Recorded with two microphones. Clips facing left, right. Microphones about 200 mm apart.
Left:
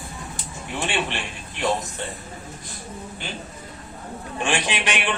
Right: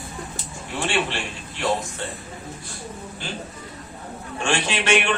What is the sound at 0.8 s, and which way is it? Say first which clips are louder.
Speech: right 2 dB; 20° left (ahead or behind).